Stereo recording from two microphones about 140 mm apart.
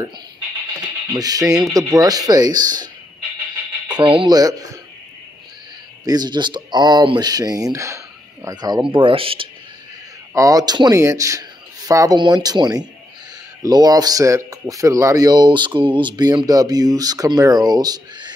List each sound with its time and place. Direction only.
1.1 s speech: 25° right (ahead or behind)
6.0 s speech: 30° right (ahead or behind)
10.3 s speech: 25° right (ahead or behind)